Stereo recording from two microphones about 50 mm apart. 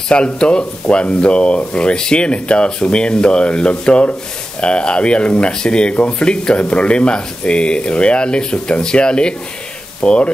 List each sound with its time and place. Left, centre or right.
0.1 s speech: centre